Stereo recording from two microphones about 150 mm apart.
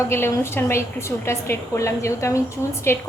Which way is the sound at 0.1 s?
15° left (ahead or behind).